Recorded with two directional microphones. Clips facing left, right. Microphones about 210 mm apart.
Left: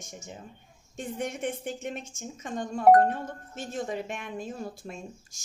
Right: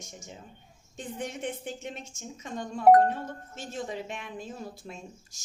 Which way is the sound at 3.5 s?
50° left (ahead or behind).